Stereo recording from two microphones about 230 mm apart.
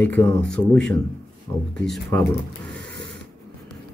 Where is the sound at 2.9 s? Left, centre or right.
Right.